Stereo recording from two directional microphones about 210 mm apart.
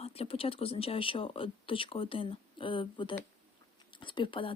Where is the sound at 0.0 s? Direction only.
30° left (ahead or behind).